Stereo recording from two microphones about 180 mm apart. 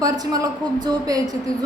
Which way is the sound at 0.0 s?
20° right (ahead or behind).